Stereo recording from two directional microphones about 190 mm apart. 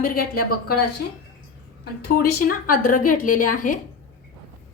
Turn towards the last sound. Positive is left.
turn(degrees=45)  # may be behind; listen again after turning